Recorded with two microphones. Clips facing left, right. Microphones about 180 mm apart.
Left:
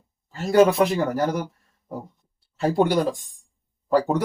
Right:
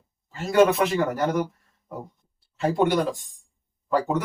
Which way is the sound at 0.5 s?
40° left (ahead or behind).